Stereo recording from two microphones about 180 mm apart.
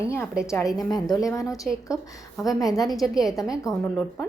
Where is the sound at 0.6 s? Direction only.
Centre (ahead or behind).